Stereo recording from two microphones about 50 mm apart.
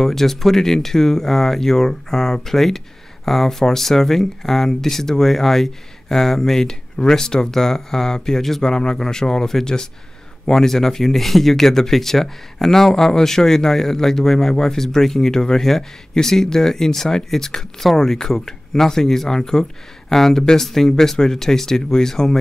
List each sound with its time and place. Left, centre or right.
0.0 s speech: centre